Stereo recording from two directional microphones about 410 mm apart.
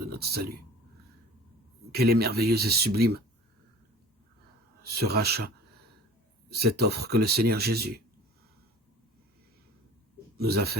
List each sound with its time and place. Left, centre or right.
0.0 s speech: right
1.9 s speech: right
4.8 s speech: right
6.5 s speech: right
10.3 s speech: right